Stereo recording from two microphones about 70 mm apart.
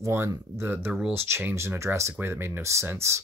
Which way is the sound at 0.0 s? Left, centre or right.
Right.